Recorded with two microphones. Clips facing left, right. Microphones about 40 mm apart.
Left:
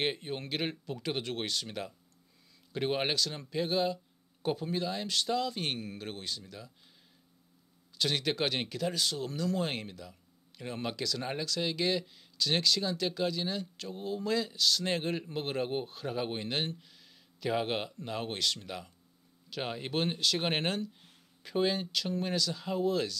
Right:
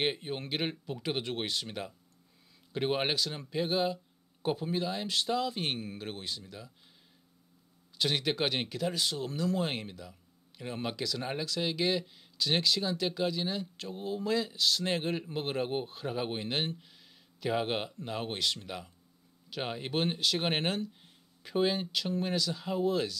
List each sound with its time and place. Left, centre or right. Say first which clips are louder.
0.0 s speech: right 1 dB; centre
8.0 s speech: right 1 dB; centre